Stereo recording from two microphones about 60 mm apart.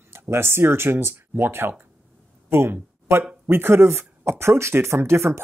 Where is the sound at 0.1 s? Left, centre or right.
Right.